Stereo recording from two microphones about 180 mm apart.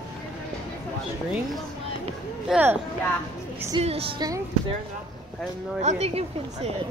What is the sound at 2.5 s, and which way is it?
Speech, 10° right (ahead or behind).